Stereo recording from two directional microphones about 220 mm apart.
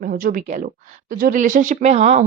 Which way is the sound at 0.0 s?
40° right (ahead or behind).